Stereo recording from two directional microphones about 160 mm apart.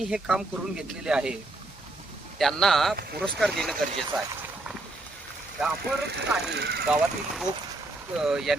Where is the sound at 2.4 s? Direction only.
Centre (ahead or behind).